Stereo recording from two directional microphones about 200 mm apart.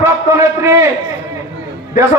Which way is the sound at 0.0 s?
15° right (ahead or behind).